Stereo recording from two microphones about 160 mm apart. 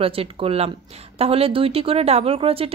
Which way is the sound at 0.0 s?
35° right (ahead or behind).